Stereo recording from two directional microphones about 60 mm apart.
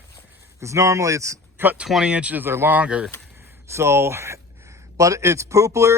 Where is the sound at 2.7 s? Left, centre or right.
Centre.